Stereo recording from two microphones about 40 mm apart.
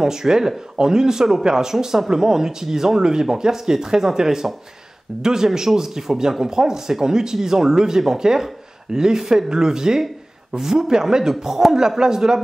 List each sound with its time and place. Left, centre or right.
0.0 s speech: centre